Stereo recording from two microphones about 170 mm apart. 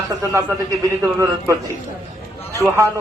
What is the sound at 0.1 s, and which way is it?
A man's voice, 25° right (ahead or behind).